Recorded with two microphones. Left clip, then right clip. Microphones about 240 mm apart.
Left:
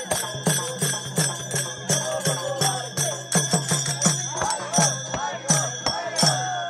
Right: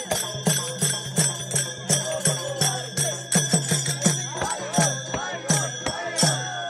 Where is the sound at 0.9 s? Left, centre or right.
Left.